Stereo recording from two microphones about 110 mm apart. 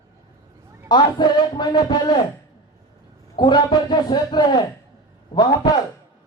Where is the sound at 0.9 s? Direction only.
45° left (ahead or behind).